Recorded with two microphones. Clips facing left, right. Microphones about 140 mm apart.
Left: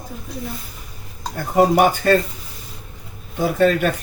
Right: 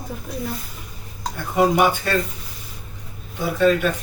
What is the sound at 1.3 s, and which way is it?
Speech, 45° left (ahead or behind).